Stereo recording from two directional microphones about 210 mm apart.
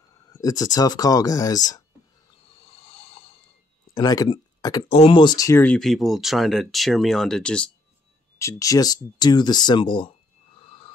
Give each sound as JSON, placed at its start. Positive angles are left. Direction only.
{"t": 0.3, "sound": "speech", "side_deg": 15}
{"t": 2.5, "sound": "a sound", "side_deg": 30}
{"t": 3.9, "sound": "speech", "side_deg": 20}
{"t": 8.4, "sound": "speech", "side_deg": 15}